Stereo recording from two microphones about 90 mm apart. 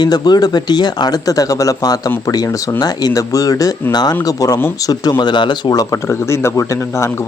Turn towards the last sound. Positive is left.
turn(degrees=30)  # may be behind; listen again after turning